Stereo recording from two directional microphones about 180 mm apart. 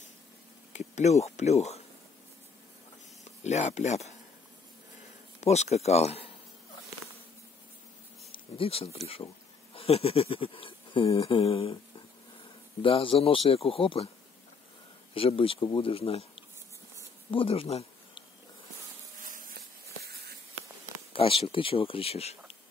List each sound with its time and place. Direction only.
0.7 s speech: 40° left (ahead or behind)
3.4 s speech: 40° left (ahead or behind)
5.4 s speech: 40° left (ahead or behind)
8.3 s speech: 30° left (ahead or behind)
12.8 s speech: 30° left (ahead or behind)
15.1 s speech: 30° left (ahead or behind)
17.3 s a sound: 30° left (ahead or behind)
19.2 s a sound: 50° right (ahead or behind)
21.1 s speech: 30° left (ahead or behind)